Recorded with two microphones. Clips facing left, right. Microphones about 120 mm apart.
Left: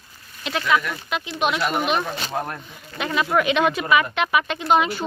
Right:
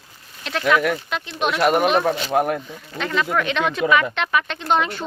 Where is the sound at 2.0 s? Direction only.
80° right.